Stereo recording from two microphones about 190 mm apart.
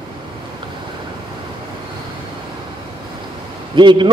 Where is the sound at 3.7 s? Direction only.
25° right (ahead or behind).